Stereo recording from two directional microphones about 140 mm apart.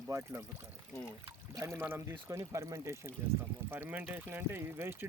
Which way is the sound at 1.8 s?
15° right (ahead or behind).